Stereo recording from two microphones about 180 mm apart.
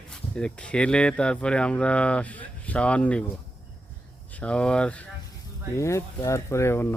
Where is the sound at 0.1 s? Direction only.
5° left (ahead or behind).